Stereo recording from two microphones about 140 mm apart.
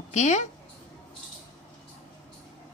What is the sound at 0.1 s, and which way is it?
Speech, 55° left (ahead or behind).